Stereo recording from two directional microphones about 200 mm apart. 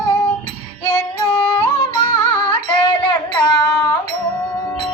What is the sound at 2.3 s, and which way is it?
Carnatic music, 25° left (ahead or behind).